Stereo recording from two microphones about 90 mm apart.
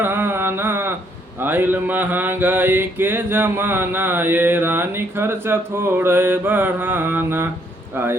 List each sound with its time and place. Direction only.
0.0 s mantra: 25° right (ahead or behind)